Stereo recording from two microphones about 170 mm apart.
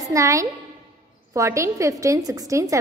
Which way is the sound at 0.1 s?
20° right (ahead or behind).